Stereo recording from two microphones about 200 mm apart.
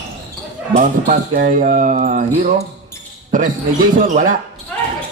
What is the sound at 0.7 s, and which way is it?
Speech, 40° right (ahead or behind).